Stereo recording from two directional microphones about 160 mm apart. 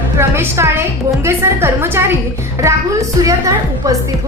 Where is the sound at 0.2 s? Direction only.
15° right (ahead or behind).